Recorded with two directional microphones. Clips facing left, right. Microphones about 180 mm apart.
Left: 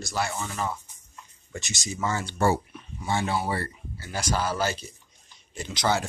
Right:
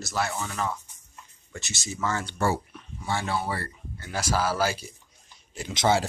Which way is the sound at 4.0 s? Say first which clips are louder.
Right 1 dB; centre (ahead or behind).